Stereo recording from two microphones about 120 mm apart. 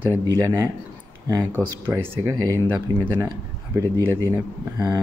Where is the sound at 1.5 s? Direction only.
20° right (ahead or behind).